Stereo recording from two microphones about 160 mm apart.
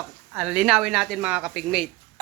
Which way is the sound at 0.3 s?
5° right (ahead or behind).